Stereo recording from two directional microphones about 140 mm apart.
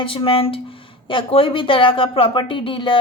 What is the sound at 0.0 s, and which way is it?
A woman's voice, 40° left (ahead or behind).